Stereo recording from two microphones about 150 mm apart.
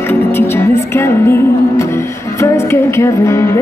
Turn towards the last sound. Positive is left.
turn(degrees=20)  # may be behind; listen again after turning